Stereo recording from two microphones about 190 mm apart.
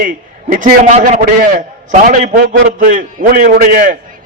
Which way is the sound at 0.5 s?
40° right (ahead or behind).